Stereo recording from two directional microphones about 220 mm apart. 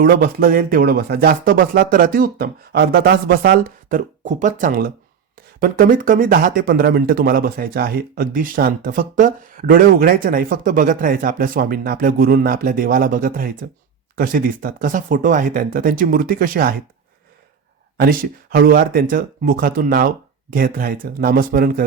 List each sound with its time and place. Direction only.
0.0 s speech: 40° right (ahead or behind)
17.9 s speech: 40° right (ahead or behind)